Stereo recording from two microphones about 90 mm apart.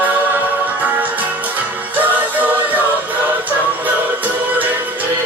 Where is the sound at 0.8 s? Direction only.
20° right (ahead or behind).